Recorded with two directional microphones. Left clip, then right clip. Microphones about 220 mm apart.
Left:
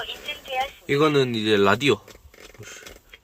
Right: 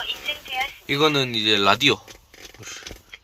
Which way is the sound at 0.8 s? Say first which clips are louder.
Even; 15° left (ahead or behind).